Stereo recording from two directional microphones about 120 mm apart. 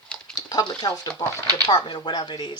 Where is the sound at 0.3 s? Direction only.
35° left (ahead or behind).